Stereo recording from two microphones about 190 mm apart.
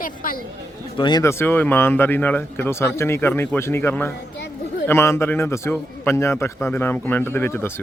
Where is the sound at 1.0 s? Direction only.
25° left (ahead or behind).